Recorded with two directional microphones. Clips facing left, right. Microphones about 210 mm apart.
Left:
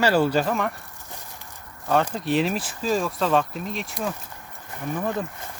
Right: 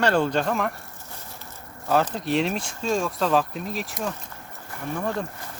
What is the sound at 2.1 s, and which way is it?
Speech, centre (ahead or behind).